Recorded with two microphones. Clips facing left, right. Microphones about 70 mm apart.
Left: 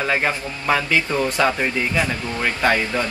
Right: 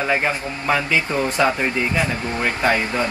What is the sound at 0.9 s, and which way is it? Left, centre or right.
Speech, centre.